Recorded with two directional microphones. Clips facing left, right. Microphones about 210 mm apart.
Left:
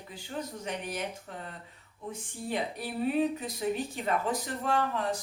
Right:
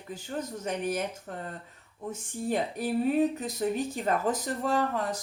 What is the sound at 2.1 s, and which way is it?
A woman's voice, 45° right (ahead or behind).